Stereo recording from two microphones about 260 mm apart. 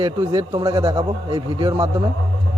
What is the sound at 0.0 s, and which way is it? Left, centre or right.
A man's voice, centre.